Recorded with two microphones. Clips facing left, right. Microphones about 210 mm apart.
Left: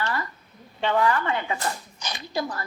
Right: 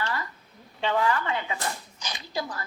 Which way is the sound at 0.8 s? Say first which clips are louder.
Left 3 dB; 55° left (ahead or behind).